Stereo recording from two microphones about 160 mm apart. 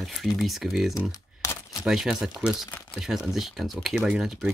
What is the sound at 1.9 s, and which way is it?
Speech, 5° right (ahead or behind).